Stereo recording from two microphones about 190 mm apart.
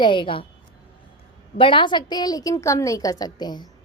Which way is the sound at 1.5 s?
25° left (ahead or behind).